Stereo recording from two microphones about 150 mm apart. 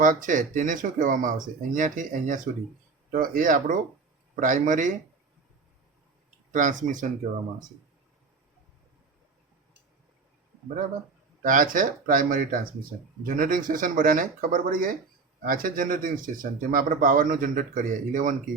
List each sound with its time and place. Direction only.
0.0 s speech: 60° right (ahead or behind)
6.5 s speech: 55° right (ahead or behind)
11.4 s speech: 65° right (ahead or behind)